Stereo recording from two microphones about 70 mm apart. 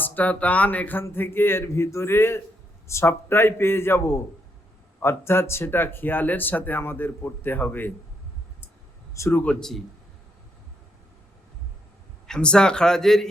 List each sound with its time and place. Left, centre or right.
0.0 s speech: left
9.3 s speech: left
9.6 s a man's voice: centre
12.3 s speech: centre